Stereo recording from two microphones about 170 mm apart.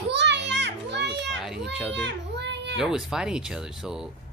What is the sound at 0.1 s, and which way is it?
Children playing, 90° right.